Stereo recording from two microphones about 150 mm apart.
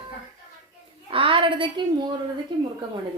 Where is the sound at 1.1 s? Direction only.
35° right (ahead or behind).